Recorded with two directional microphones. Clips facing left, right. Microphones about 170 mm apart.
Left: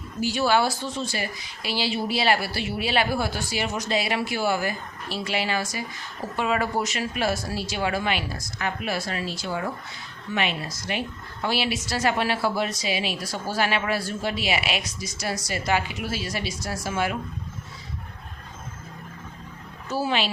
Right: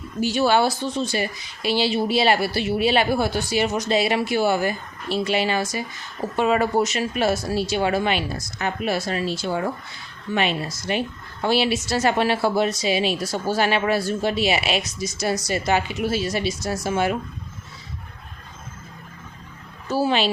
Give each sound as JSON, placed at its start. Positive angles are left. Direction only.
{"t": 0.2, "sound": "a woman's voice", "side_deg": -20}
{"t": 19.9, "sound": "a woman's voice", "side_deg": -30}